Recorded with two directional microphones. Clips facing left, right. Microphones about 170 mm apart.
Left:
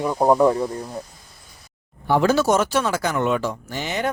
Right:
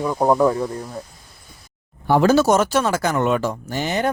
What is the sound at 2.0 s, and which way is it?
Speech, 40° right (ahead or behind).